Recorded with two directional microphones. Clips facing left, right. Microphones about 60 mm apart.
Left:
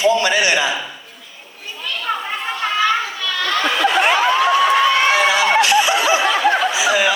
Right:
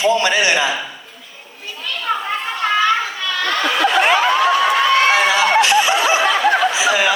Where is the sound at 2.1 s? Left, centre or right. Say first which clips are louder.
Right 2 dB; centre.